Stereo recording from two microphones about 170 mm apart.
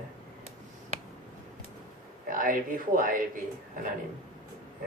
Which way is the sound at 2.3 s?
55° right (ahead or behind).